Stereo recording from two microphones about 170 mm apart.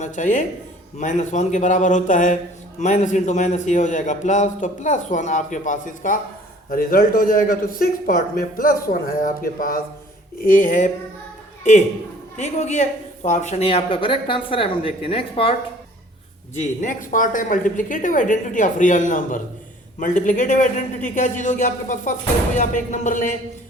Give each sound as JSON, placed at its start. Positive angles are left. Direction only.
{"t": 0.0, "sound": "a man's voice", "side_deg": 50}
{"t": 12.4, "sound": "speech", "side_deg": 40}
{"t": 16.6, "sound": "a man's voice", "side_deg": 50}